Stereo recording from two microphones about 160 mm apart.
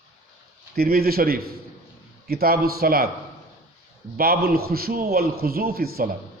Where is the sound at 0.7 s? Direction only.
75° right (ahead or behind).